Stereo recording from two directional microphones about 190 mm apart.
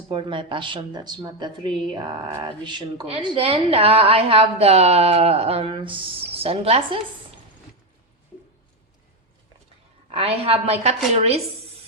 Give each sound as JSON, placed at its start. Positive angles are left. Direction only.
{"t": 0.1, "sound": "a woman's voice", "side_deg": -25}
{"t": 10.1, "sound": "a woman's voice", "side_deg": -30}